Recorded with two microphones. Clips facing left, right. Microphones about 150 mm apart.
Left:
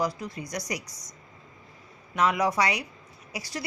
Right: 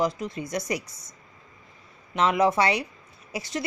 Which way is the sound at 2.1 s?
25° right (ahead or behind).